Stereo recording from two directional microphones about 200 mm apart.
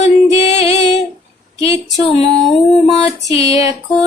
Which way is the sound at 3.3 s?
30° left (ahead or behind).